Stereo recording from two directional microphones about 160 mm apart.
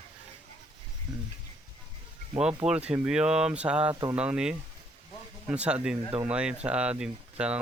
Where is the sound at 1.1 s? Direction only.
25° right (ahead or behind).